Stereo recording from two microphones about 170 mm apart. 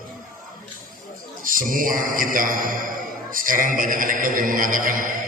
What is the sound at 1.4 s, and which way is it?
A man's voice, 55° right (ahead or behind).